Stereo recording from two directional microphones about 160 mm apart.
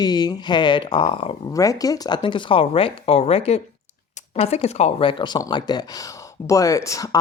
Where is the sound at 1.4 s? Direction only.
20° left (ahead or behind).